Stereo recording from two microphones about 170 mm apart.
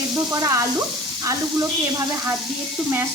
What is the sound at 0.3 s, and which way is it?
Speech, 15° right (ahead or behind).